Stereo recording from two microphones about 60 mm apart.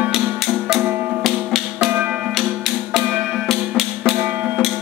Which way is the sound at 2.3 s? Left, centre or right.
Centre.